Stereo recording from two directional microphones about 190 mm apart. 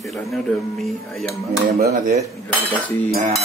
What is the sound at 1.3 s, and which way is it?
Speech, 55° right (ahead or behind).